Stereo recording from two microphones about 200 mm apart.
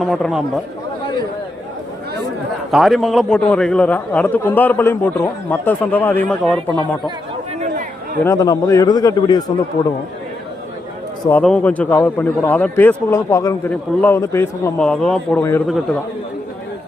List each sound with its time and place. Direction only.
0.0 s speech: centre (ahead or behind)
2.7 s a man's voice: centre (ahead or behind)
8.2 s a man's voice: 15° left (ahead or behind)
11.3 s a man's voice: 5° left (ahead or behind)